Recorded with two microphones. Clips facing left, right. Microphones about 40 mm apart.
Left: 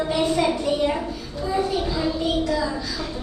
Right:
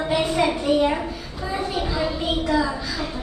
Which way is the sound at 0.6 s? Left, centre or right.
Right.